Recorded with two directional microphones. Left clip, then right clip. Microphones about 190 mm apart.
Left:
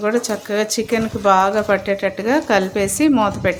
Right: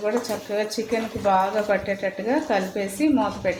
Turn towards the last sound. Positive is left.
turn(degrees=40)  # may be behind; listen again after turning